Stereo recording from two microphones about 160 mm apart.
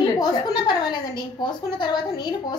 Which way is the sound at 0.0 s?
25° left (ahead or behind).